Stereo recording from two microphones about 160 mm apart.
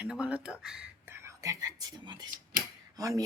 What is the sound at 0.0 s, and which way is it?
Speech, 5° right (ahead or behind).